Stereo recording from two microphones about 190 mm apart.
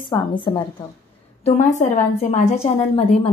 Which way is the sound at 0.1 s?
25° left (ahead or behind).